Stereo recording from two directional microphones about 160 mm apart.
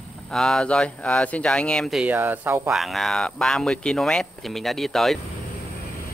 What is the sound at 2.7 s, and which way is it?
Speech, centre (ahead or behind).